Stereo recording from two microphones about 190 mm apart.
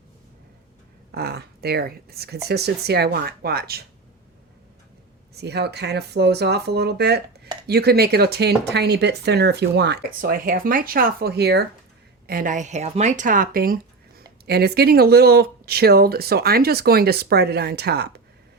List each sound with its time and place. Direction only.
1.1 s speech: 55° right (ahead or behind)
5.3 s speech: 60° right (ahead or behind)
12.3 s speech: 45° right (ahead or behind)